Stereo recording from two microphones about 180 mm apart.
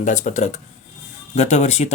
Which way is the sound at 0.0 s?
45° left (ahead or behind).